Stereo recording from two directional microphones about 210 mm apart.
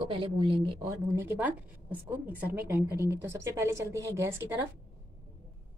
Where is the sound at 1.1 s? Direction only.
10° right (ahead or behind).